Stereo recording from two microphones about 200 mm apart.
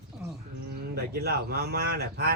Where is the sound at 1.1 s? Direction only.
50° right (ahead or behind).